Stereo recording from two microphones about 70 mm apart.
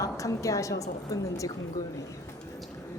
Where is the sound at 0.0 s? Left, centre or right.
Left.